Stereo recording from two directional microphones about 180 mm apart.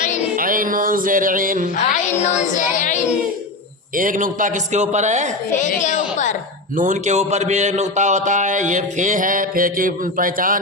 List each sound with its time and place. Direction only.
0.3 s music: 50° right (ahead or behind)
2.2 s child singing: 40° left (ahead or behind)
3.9 s a man's voice: 50° right (ahead or behind)
5.5 s a woman's voice: 45° left (ahead or behind)
6.7 s a man's voice: 45° right (ahead or behind)